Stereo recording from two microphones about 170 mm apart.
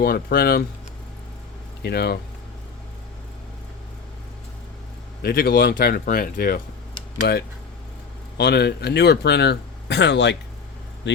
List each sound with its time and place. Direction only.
0.0 s speech: 60° left (ahead or behind)
1.8 s speech: 70° left (ahead or behind)
5.2 s speech: 60° left (ahead or behind)
7.2 s speech: 70° left (ahead or behind); by 11.2 s 90° left